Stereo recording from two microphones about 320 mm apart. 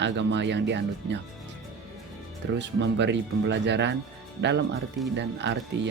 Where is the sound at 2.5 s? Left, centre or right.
Right.